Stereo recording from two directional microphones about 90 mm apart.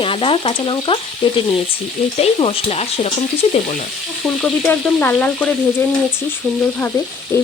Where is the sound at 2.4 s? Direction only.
90° left.